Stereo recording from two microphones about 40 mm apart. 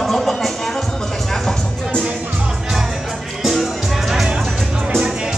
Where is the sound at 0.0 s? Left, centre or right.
Centre.